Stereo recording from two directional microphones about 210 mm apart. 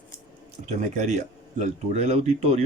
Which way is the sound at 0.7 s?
35° right (ahead or behind).